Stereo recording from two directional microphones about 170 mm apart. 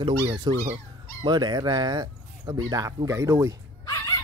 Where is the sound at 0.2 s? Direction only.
20° right (ahead or behind).